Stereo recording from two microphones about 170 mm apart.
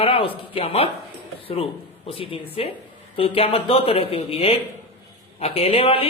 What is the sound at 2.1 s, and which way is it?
Speech, 35° left (ahead or behind).